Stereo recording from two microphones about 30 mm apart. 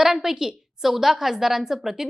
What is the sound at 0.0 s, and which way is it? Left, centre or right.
A woman's voice, centre.